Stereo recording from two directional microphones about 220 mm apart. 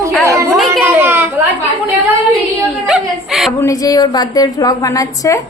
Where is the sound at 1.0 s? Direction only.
10° right (ahead or behind).